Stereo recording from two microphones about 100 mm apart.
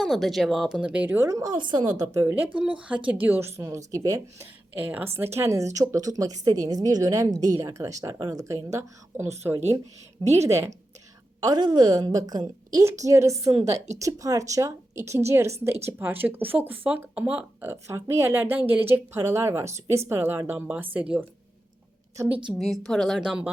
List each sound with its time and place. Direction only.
0.0 s speech: centre (ahead or behind); by 1.3 s 20° right (ahead or behind)
1.5 s a woman's voice: 50° right (ahead or behind)
2.3 s a woman's voice: 15° right (ahead or behind); by 4.4 s 35° right (ahead or behind)
4.8 s a woman's voice: 15° right (ahead or behind)
11.3 s a woman's voice: 45° right (ahead or behind)
12.8 s a woman's voice: 30° right (ahead or behind); by 17.4 s 15° right (ahead or behind)
17.6 s a woman's voice: 25° right (ahead or behind)
22.5 s speech: centre (ahead or behind)